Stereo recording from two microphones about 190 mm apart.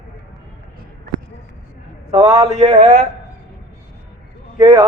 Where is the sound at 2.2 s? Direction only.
20° right (ahead or behind).